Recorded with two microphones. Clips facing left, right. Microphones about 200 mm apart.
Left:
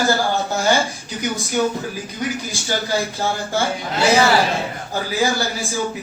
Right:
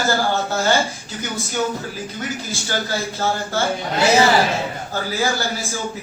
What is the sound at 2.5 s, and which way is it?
A man's voice, 15° left (ahead or behind).